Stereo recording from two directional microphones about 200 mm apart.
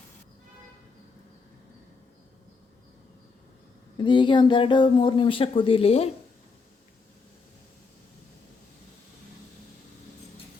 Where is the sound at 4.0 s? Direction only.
25° left (ahead or behind).